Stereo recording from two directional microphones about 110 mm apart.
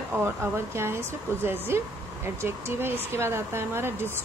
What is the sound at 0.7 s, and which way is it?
Speech, 20° right (ahead or behind).